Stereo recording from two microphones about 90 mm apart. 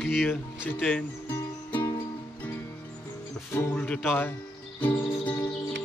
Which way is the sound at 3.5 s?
25° left (ahead or behind).